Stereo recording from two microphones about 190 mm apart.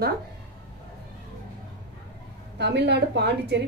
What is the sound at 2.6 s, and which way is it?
A woman's voice, 60° right (ahead or behind).